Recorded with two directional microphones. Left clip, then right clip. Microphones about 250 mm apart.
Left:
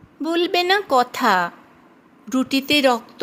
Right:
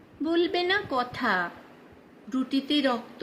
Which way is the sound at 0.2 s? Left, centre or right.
Left.